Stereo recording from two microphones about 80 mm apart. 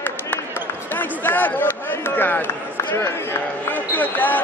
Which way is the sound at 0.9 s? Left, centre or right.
Left.